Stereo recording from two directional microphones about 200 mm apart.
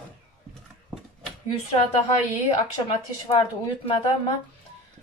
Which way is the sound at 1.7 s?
30° left (ahead or behind).